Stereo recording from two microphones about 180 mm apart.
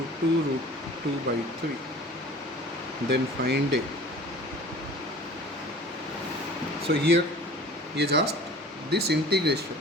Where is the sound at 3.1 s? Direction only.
65° right (ahead or behind).